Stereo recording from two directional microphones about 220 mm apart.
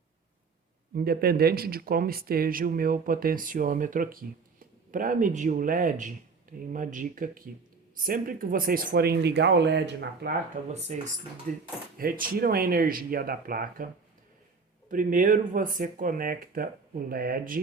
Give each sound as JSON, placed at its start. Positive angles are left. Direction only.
{"t": 0.9, "sound": "speech", "side_deg": -45}
{"t": 10.7, "sound": "speech", "side_deg": -30}
{"t": 14.8, "sound": "speech", "side_deg": -35}